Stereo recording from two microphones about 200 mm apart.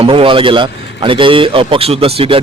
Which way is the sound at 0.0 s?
25° right (ahead or behind).